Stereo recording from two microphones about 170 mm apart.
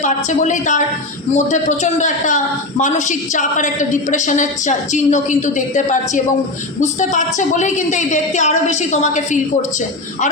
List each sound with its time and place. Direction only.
0.0 s a man's voice: 45° left (ahead or behind)